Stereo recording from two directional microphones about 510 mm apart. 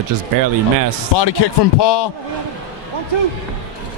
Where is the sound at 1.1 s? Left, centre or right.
Left.